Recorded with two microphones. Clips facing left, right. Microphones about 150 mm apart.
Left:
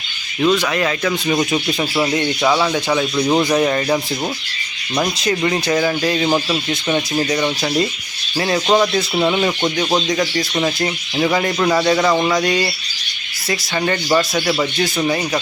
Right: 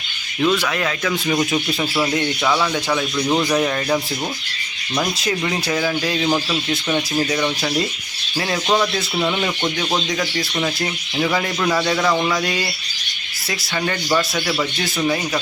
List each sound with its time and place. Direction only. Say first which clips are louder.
0.3 s speech: left 3 dB; 15° left (ahead or behind)
0.6 s speech: left 3 dB; centre (ahead or behind); by 3.6 s 20° left (ahead or behind)
3.6 s speech: left 3 dB; 10° left (ahead or behind)
5.7 s speech: left 4 dB; 5° left (ahead or behind)
8.6 s speech: left 4 dB; 20° left (ahead or behind)
10.8 s speech: left 3 dB; 5° left (ahead or behind)
11.6 s speech: left 4 dB; 15° left (ahead or behind)
12.4 s speech: left 5 dB; centre (ahead or behind)
13.7 s speech: left 3 dB; 5° left (ahead or behind)
14.3 s speech: left 4 dB; 20° left (ahead or behind)